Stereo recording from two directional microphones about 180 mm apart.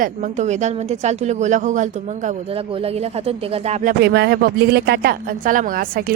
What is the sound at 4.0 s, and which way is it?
Speech, 65° right (ahead or behind).